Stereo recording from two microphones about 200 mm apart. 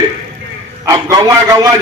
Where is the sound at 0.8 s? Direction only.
15° right (ahead or behind).